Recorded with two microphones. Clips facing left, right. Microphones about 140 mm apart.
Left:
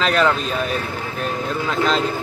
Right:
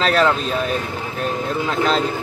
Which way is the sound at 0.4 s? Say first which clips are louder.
Right 1 dB; centre (ahead or behind).